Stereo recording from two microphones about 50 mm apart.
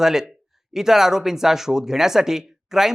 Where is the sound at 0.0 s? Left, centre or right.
Centre.